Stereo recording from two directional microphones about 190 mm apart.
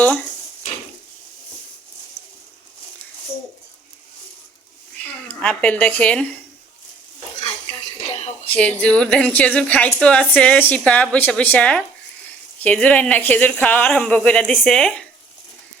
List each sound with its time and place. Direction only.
5.3 s a woman's voice: 5° left (ahead or behind)
7.4 s music: 30° left (ahead or behind)
8.5 s a woman's voice: 5° left (ahead or behind)